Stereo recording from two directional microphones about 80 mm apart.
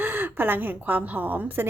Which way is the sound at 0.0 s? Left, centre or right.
Right.